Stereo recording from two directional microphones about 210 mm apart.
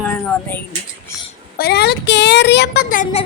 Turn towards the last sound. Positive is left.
turn(degrees=45)  # may be behind; listen again after turning